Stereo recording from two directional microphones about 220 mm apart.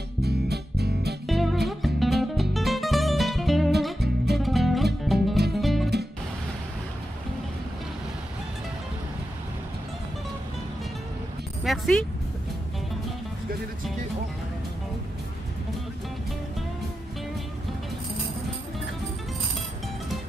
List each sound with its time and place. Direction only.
0.2 s music: 45° right (ahead or behind)
1.2 s music: centre (ahead or behind)
11.6 s music: centre (ahead or behind)